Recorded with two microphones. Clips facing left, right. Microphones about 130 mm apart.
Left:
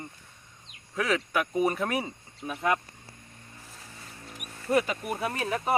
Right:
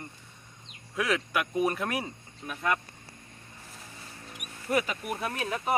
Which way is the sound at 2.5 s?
15° left (ahead or behind).